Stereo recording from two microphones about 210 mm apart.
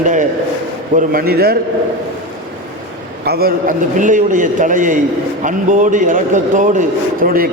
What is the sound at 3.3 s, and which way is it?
A man's voice, 45° right (ahead or behind).